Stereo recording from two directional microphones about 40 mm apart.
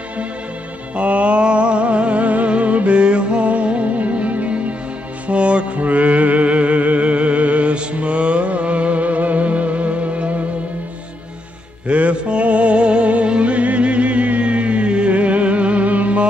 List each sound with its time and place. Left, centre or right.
0.9 s music: right
11.9 s music: right